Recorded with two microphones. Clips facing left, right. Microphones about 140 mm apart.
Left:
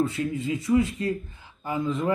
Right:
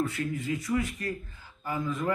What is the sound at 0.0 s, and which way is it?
Speech, 25° left (ahead or behind).